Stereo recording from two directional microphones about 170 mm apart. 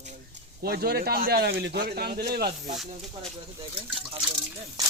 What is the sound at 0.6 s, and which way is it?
Speech, 65° right (ahead or behind).